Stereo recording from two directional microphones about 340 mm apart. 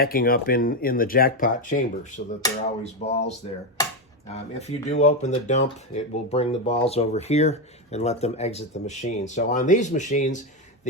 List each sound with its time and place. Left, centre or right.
0.0 s speech: left